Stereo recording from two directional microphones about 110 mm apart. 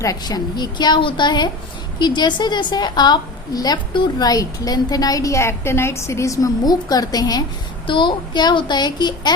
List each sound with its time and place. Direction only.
0.0 s a woman's voice: 35° left (ahead or behind)
7.9 s a woman's voice: 50° left (ahead or behind)